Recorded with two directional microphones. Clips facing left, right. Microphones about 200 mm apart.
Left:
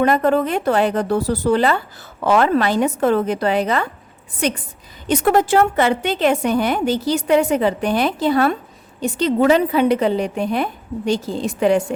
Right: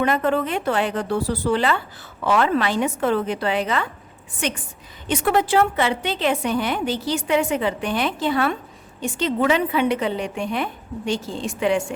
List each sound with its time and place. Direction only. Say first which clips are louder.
0.0 s a woman's voice: left 4 dB; 40° left (ahead or behind)